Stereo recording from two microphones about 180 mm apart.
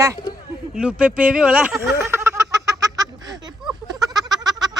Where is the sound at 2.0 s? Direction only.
15° right (ahead or behind).